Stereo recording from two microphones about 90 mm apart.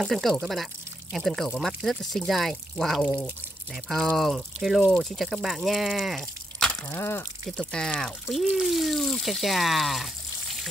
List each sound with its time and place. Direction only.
0.1 s speech: centre (ahead or behind)
7.0 s speech: 25° left (ahead or behind)
7.4 s speech: 10° left (ahead or behind)